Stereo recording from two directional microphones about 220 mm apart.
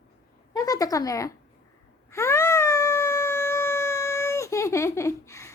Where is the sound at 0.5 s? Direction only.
15° left (ahead or behind).